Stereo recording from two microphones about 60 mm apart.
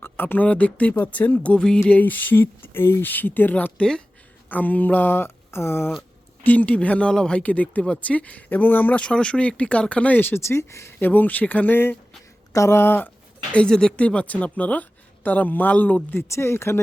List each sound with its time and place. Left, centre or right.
0.0 s a sound: left
0.4 s speech: left
1.9 s speech: left
3.8 s speech: centre
4.4 s speech: left
6.0 s a sound: left
6.7 s speech: centre
9.0 s speech: centre
10.2 s speech: left
10.5 s speech: left
11.0 s speech: left
12.5 s speech: left
13.5 s speech: centre
16.2 s speech: left